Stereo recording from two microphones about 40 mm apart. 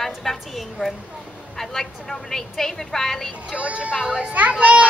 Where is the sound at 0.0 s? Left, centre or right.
Centre.